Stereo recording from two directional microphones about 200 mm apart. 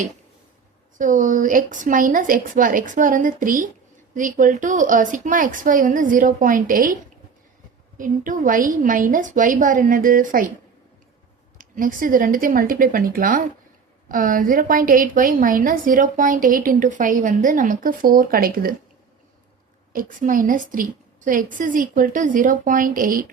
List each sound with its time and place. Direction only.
0.9 s a woman's voice: 40° right (ahead or behind)
7.9 s a woman's voice: 40° right (ahead or behind)
11.5 s a woman's voice: 40° right (ahead or behind)
19.9 s a woman's voice: 45° right (ahead or behind)